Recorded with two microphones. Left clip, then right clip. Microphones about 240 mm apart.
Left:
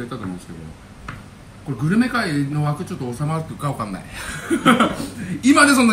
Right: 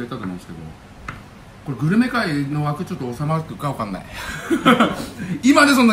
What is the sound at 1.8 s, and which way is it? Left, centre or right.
A man's voice, centre.